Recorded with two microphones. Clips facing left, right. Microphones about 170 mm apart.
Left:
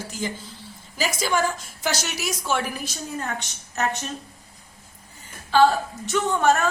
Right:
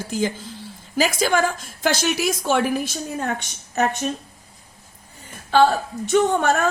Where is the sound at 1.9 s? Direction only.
55° right (ahead or behind).